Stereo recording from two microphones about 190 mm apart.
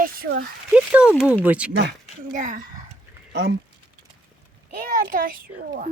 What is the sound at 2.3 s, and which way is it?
Speech, 45° right (ahead or behind).